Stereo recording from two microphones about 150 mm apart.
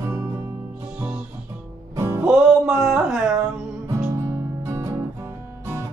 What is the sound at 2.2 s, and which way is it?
Music, 5° right (ahead or behind).